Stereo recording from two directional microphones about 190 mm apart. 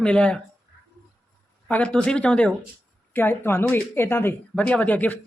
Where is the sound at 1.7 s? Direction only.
5° left (ahead or behind).